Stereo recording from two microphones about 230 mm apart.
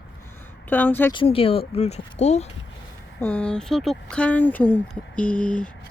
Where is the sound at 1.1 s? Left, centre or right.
Left.